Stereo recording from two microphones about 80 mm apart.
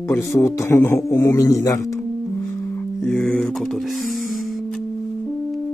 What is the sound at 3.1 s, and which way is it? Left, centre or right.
Speech, centre.